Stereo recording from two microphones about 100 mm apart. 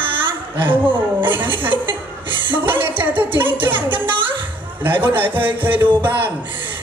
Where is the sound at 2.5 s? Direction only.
20° right (ahead or behind).